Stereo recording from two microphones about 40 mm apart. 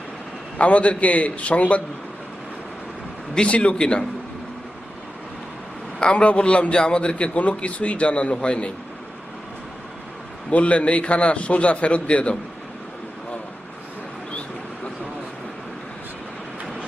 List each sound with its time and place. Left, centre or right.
0.6 s a man's voice: left
3.3 s a man's voice: left
6.0 s a man's voice: left
10.5 s a man's voice: left